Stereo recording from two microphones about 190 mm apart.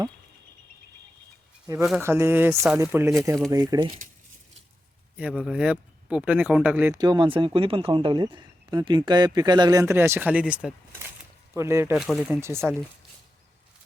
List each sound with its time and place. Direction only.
2.0 s speech: 15° right (ahead or behind)
5.1 s speech: 5° right (ahead or behind)
11.9 s speech: centre (ahead or behind)
12.4 s speech: 15° right (ahead or behind)